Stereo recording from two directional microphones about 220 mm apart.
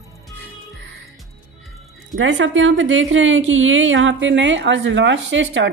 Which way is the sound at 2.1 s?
60° right (ahead or behind).